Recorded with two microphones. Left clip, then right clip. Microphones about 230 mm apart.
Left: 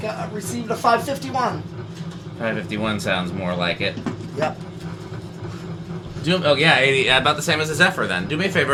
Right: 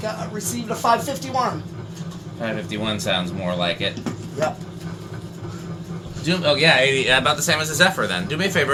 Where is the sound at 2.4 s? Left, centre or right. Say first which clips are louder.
Left 2 dB; left.